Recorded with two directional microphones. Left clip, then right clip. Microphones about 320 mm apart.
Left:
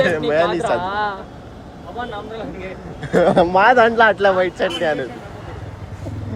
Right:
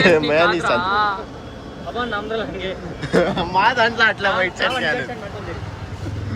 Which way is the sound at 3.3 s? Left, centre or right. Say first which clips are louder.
Left 5 dB; centre.